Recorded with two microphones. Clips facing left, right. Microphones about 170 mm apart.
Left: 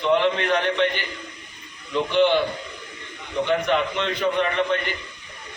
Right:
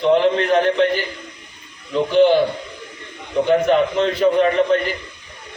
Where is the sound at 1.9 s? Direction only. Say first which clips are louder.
Right 5 dB; 35° right (ahead or behind).